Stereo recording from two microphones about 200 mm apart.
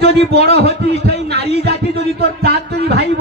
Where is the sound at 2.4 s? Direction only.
50° right (ahead or behind).